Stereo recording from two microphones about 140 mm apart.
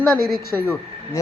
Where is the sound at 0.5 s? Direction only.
10° left (ahead or behind).